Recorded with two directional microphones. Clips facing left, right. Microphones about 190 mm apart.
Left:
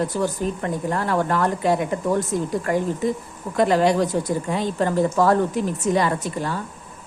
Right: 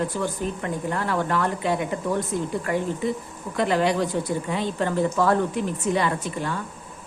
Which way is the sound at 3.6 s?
40° left (ahead or behind).